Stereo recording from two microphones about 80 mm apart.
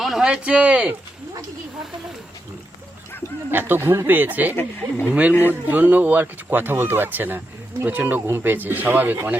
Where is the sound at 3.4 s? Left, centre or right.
Right.